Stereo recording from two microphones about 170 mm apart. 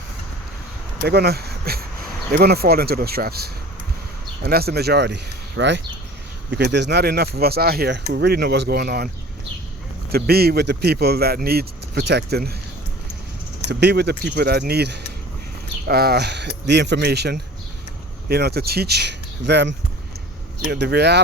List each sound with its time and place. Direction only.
1.0 s speech: 70° right (ahead or behind)
10.1 s speech: 65° right (ahead or behind)
13.7 s speech: 75° right (ahead or behind)